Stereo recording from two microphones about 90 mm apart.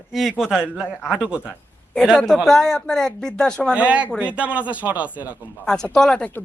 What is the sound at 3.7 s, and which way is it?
Speech, 15° right (ahead or behind).